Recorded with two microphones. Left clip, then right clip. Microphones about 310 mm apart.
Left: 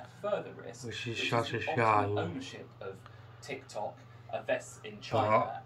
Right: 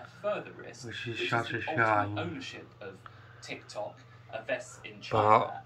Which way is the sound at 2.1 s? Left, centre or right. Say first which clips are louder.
Left 1 dB; left.